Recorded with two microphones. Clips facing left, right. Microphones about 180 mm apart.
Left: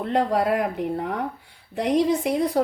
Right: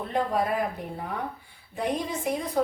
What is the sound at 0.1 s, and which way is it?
Speech, 75° left (ahead or behind).